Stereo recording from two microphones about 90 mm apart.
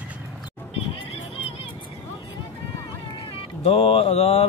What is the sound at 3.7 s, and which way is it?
Mantra, 90° left.